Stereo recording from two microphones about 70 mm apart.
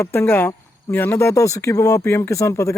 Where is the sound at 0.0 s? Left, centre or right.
Left.